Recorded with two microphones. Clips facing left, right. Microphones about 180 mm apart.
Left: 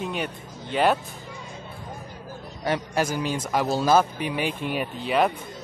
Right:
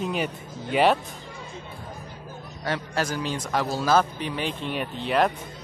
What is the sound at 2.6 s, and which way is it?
Speech, 15° left (ahead or behind).